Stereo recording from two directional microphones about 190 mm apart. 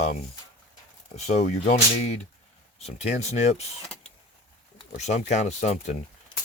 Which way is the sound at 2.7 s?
35° left (ahead or behind).